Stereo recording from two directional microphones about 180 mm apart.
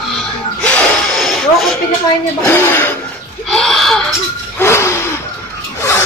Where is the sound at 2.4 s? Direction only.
10° left (ahead or behind).